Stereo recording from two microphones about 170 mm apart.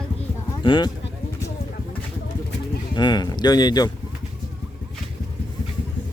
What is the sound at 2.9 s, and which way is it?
Speech, 25° left (ahead or behind).